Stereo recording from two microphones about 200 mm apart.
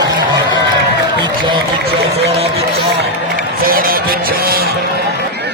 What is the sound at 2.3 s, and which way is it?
Run, 30° right (ahead or behind).